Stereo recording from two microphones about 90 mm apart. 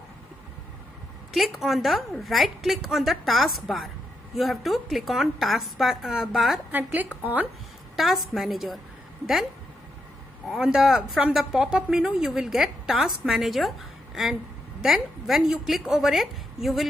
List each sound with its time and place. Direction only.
1.3 s speech: centre (ahead or behind)
6.7 s a woman's voice: 20° right (ahead or behind)
7.9 s speech: centre (ahead or behind)
10.5 s speech: 5° right (ahead or behind)